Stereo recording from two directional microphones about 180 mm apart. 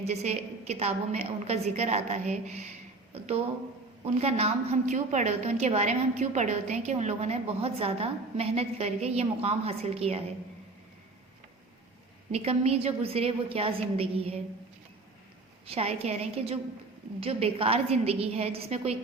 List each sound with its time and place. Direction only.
0.0 s a woman's voice: 35° right (ahead or behind)
12.3 s a woman's voice: 35° right (ahead or behind)
15.6 s a woman's voice: 35° right (ahead or behind)